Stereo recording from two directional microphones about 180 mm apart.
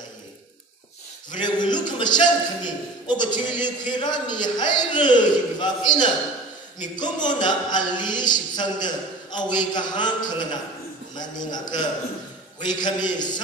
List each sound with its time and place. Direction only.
1.4 s a man's voice: 25° left (ahead or behind)